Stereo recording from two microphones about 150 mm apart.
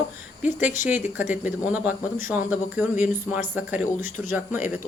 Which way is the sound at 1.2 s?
55° left (ahead or behind).